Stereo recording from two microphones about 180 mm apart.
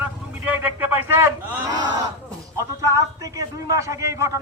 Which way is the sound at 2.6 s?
15° right (ahead or behind).